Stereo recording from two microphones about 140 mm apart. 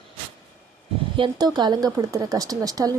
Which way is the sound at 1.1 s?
35° right (ahead or behind).